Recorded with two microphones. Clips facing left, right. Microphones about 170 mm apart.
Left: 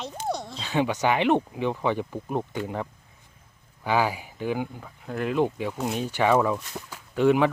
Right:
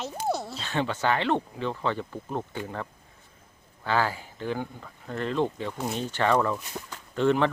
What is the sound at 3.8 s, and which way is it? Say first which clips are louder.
Speech: left 2 dB; 15° left (ahead or behind).